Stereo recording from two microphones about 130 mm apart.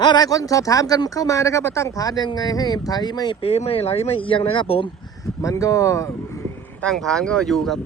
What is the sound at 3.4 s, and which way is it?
Speech, 50° left (ahead or behind).